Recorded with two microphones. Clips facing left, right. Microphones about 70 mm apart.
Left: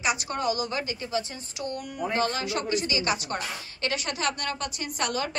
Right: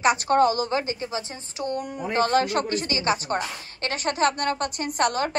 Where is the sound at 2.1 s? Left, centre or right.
Right.